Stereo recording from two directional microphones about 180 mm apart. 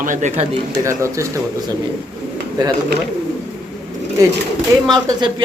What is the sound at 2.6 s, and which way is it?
Speech, 25° right (ahead or behind).